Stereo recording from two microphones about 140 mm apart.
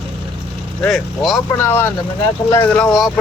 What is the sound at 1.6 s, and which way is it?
Speech, 15° left (ahead or behind).